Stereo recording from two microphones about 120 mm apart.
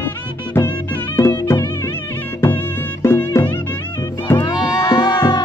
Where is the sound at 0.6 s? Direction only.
25° left (ahead or behind).